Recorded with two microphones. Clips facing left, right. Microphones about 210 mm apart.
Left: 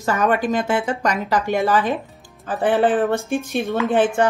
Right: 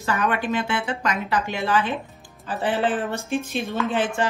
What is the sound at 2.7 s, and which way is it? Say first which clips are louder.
Speech: left 7 dB; 15° left (ahead or behind).